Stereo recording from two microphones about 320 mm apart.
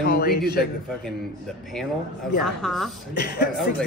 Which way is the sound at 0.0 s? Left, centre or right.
Left.